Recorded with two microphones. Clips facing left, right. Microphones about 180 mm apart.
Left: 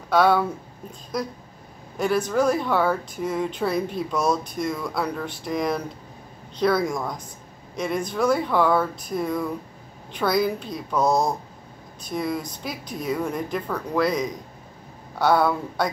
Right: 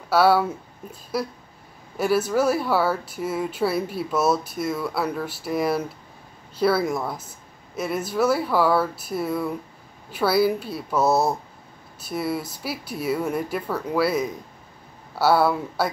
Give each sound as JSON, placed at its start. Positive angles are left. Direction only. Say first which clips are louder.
{"t": 0.1, "sound": "speech", "louder": "right 1 dB", "side_deg": -5}